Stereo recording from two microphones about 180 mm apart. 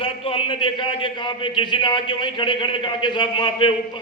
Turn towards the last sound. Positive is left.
turn(degrees=25)  # may be behind; listen again after turning